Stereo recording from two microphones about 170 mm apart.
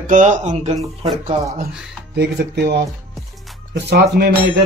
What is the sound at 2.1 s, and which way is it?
Speech, 75° right (ahead or behind).